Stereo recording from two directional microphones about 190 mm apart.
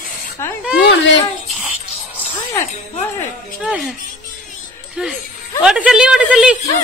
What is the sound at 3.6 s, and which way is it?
Speech, 5° right (ahead or behind).